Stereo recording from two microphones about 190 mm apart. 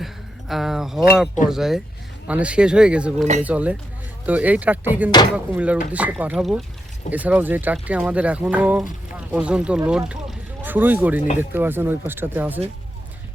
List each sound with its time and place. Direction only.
0.0 s a sound: centre (ahead or behind)
1.5 s speech: centre (ahead or behind)
5.1 s speech: 20° left (ahead or behind)
5.5 s speech: 5° right (ahead or behind)